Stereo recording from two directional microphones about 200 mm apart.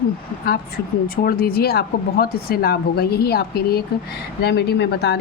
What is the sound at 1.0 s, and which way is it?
Speech, 45° left (ahead or behind).